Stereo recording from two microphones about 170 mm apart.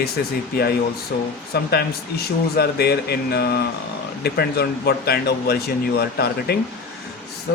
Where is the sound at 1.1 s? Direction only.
65° left (ahead or behind).